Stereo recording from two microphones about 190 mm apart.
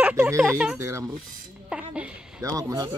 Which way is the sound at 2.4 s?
20° right (ahead or behind).